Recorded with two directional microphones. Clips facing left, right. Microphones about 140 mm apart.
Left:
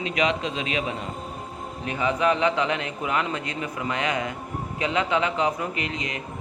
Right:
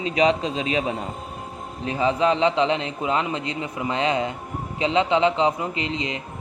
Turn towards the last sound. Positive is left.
turn(degrees=-25)  # may be behind; listen again after turning